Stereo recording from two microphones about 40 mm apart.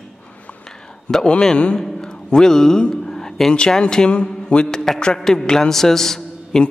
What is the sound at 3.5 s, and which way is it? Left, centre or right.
Speech, left.